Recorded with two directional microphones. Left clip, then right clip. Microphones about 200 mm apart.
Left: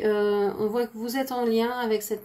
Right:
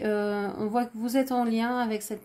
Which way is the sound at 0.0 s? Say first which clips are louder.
Left 5 dB; 40° right (ahead or behind).